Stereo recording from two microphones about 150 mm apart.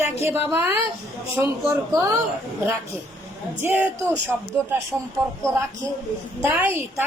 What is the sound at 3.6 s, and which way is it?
Speech, 15° right (ahead or behind).